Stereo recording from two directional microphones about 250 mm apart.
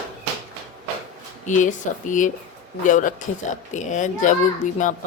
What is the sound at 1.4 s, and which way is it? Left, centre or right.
Speech, left.